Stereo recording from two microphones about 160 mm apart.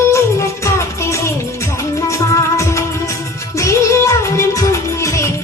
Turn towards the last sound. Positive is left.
turn(degrees=20)  # may be behind; listen again after turning